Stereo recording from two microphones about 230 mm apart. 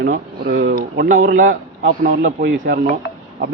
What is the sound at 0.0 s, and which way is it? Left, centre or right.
Speech, right.